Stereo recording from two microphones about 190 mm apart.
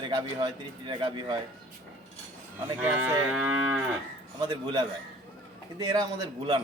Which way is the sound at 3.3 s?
5° right (ahead or behind).